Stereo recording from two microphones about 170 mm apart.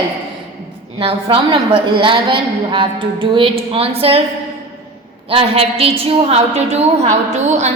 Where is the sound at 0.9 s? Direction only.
30° right (ahead or behind).